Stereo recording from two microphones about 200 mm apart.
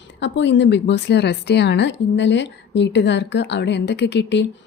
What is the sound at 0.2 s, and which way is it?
A woman's voice, 60° left (ahead or behind).